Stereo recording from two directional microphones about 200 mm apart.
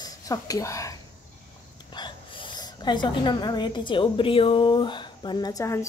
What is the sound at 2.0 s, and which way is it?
A woman's voice, 25° left (ahead or behind).